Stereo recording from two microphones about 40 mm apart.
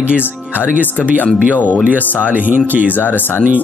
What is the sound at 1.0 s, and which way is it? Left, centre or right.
Speech, right.